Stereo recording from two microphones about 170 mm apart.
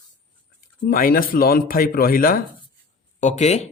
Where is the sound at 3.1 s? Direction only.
45° left (ahead or behind).